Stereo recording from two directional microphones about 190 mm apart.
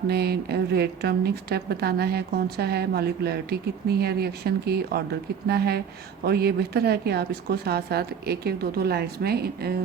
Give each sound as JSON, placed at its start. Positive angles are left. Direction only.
{"t": 0.1, "sound": "a woman's voice", "side_deg": -55}